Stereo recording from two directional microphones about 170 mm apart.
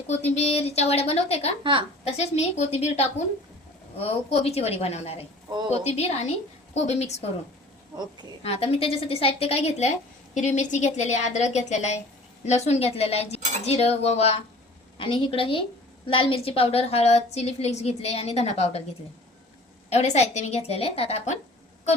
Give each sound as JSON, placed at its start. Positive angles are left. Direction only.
{"t": 0.1, "sound": "a woman's voice", "side_deg": 40}
{"t": 7.9, "sound": "a woman's voice", "side_deg": -20}
{"t": 8.4, "sound": "a woman's voice", "side_deg": 35}
{"t": 19.9, "sound": "a woman's voice", "side_deg": 40}